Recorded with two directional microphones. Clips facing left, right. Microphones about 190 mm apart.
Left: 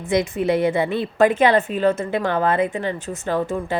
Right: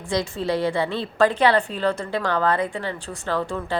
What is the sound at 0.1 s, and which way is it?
A woman's voice, 20° left (ahead or behind).